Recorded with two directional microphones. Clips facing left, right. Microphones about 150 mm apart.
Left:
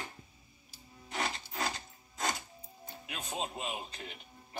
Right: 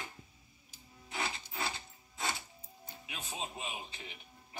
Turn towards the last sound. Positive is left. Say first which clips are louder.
# left 4 dB
turn(degrees=50)  # may be behind; listen again after turning